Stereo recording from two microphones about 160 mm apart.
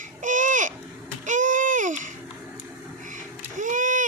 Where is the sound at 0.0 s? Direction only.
55° right (ahead or behind).